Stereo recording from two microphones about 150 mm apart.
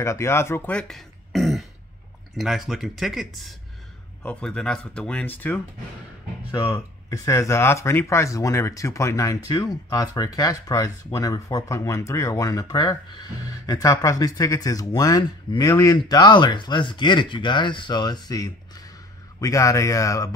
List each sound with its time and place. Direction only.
0.0 s speech: 20° left (ahead or behind)